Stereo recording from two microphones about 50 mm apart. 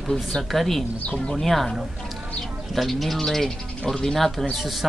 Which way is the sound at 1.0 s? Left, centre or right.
Left.